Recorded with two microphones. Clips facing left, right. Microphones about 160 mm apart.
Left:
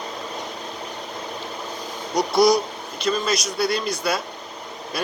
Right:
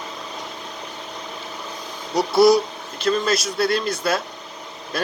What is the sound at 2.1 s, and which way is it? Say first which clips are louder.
Speech: right 3 dB; 5° right (ahead or behind).